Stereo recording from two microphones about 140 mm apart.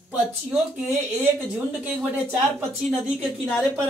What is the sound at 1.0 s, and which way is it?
Speech, 10° right (ahead or behind).